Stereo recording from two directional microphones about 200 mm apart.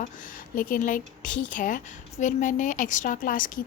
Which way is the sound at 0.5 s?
45° left (ahead or behind).